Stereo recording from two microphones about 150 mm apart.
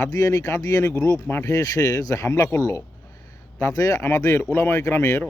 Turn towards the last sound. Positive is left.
turn(degrees=20)  # may be behind; listen again after turning